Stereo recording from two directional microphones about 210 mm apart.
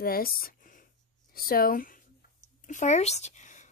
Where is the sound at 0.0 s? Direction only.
45° left (ahead or behind).